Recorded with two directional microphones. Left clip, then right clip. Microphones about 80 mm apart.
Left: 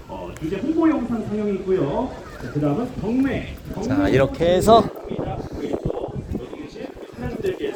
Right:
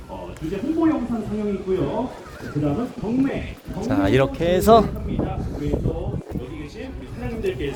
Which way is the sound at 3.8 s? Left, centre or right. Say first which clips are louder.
Even; right.